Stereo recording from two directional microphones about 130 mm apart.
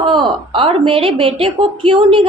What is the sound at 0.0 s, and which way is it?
A woman's voice, 40° right (ahead or behind).